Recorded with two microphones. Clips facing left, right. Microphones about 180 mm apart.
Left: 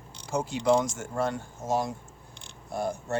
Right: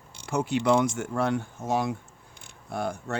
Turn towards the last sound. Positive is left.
turn(degrees=-65)  # may be behind; listen again after turning